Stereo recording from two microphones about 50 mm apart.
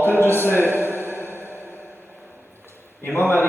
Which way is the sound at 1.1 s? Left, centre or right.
Left.